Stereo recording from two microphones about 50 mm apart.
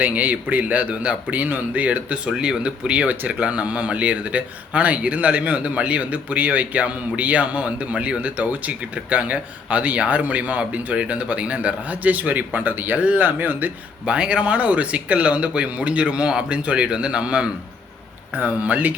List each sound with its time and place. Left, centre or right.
0.0 s a man's voice: right
2.3 s a man's voice: centre; by 13.7 s right
14.1 s speech: right
18.3 s a man's voice: right